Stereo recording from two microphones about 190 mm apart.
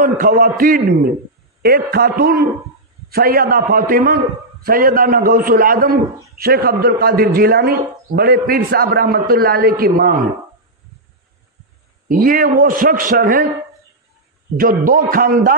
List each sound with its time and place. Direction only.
0.0 s a man's voice: 45° right (ahead or behind)
12.1 s a man's voice: 50° right (ahead or behind)
14.6 s a man's voice: 45° right (ahead or behind)